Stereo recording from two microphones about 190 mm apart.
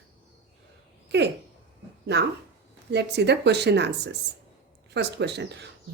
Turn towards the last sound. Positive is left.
turn(degrees=-65)  # may be behind; listen again after turning